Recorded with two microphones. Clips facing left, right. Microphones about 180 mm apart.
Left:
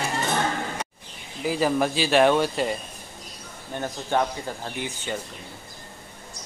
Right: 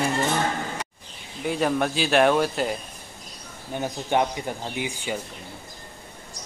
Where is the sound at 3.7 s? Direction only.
15° right (ahead or behind).